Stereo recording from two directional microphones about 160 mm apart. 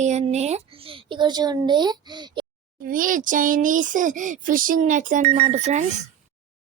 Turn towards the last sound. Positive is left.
turn(degrees=-45)  # may be behind; listen again after turning